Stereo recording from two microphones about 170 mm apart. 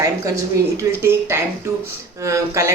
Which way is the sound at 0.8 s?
15° right (ahead or behind).